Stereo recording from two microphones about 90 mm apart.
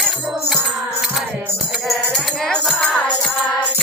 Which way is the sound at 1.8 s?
5° left (ahead or behind).